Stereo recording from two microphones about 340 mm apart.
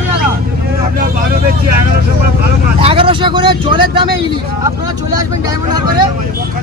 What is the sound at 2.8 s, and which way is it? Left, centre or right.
Speech, centre.